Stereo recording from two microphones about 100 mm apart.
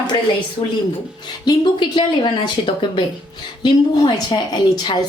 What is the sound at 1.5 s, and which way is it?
A woman's voice, 50° left (ahead or behind).